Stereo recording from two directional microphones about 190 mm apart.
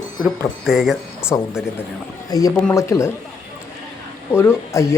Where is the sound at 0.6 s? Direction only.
Centre (ahead or behind).